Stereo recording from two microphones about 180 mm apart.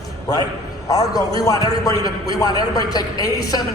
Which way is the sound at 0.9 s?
20° left (ahead or behind).